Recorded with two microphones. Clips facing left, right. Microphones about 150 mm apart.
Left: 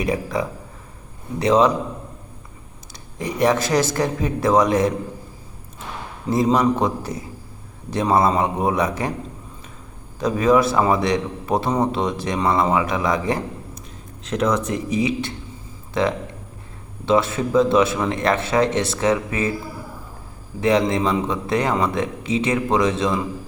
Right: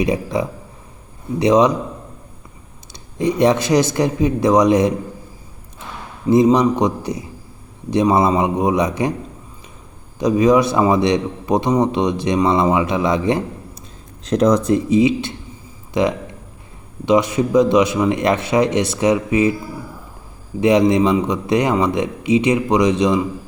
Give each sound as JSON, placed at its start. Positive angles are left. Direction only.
{"t": 0.0, "sound": "a man's voice", "side_deg": -20}
{"t": 2.9, "sound": "a man's voice", "side_deg": -20}
{"t": 6.2, "sound": "speech", "side_deg": -15}
{"t": 10.2, "sound": "a man's voice", "side_deg": -15}
{"t": 14.3, "sound": "speech", "side_deg": -35}
{"t": 20.6, "sound": "speech", "side_deg": -20}